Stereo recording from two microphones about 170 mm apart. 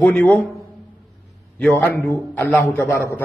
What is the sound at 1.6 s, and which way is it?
A man's voice, 10° left (ahead or behind).